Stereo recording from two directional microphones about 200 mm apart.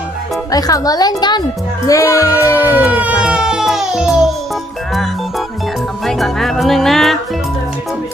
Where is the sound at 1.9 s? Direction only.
15° left (ahead or behind).